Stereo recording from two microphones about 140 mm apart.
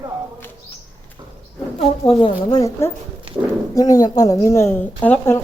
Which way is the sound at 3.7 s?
25° left (ahead or behind).